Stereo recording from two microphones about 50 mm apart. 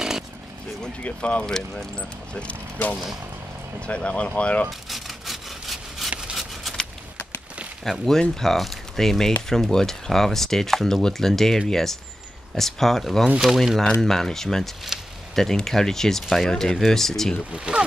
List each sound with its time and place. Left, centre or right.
1.0 s speech: left
1.4 s speech: centre
3.8 s speech: left
4.6 s rub: centre
8.0 s speech: centre
13.8 s speech: centre
14.9 s a sound: centre
15.3 s speech: centre
17.5 s speech: right